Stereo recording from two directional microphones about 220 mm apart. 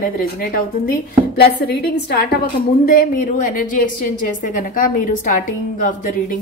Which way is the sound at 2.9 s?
40° left (ahead or behind).